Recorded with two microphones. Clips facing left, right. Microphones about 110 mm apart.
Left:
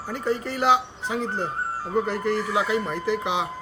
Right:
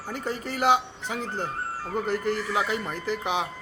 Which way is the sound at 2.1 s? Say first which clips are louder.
Left 2 dB; 35° left (ahead or behind).